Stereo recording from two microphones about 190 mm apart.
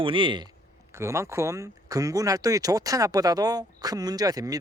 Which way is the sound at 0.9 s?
15° right (ahead or behind).